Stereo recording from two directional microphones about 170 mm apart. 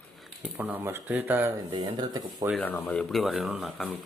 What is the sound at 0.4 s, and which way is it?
Speech, 10° right (ahead or behind).